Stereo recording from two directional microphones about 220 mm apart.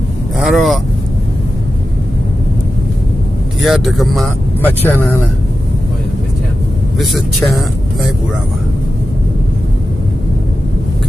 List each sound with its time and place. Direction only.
0.3 s speech: centre (ahead or behind)
3.6 s speech: centre (ahead or behind)
7.0 s speech: centre (ahead or behind)